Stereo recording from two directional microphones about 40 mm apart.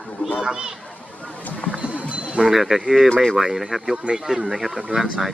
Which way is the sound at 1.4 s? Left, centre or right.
Left.